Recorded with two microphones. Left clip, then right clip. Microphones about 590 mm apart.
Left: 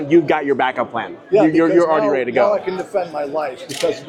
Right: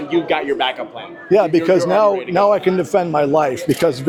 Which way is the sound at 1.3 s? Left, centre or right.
Right.